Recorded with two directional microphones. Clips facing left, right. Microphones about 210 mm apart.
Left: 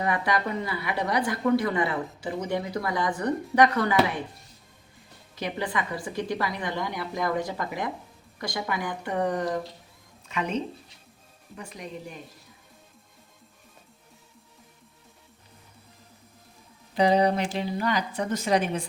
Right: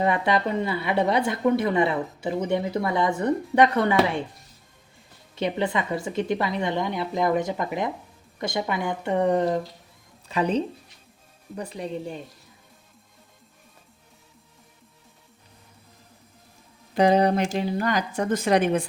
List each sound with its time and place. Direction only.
0.0 s speech: 25° right (ahead or behind)
5.3 s a woman's voice: 25° right (ahead or behind)
16.9 s a woman's voice: 50° right (ahead or behind)